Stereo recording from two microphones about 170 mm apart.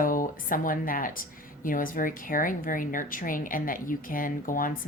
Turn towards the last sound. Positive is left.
turn(degrees=55)  # may be behind; listen again after turning